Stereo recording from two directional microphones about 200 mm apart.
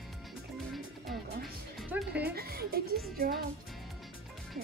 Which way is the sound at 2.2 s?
50° right (ahead or behind).